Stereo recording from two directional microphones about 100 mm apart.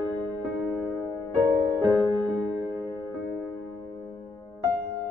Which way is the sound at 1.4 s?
35° right (ahead or behind).